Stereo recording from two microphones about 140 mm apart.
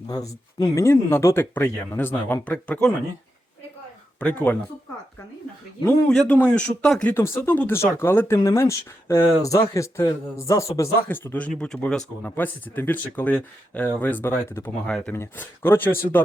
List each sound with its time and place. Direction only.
0.1 s speech: 25° left (ahead or behind); by 2.9 s 10° left (ahead or behind)
4.2 s speech: 10° left (ahead or behind)
6.1 s speech: 10° left (ahead or behind)